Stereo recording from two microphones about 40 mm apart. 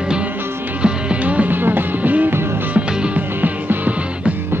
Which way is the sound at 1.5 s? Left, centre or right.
Right.